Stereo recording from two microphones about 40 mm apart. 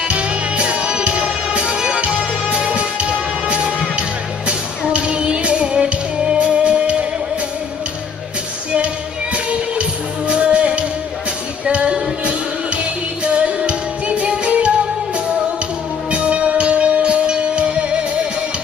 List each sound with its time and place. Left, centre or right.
0.1 s music: right
4.9 s music: right
8.7 s music: right
16.1 s music: right